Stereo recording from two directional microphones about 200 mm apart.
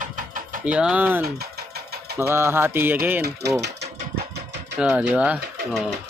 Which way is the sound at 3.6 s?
60° right (ahead or behind).